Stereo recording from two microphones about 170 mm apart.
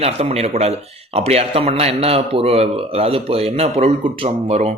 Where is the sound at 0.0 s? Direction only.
35° right (ahead or behind).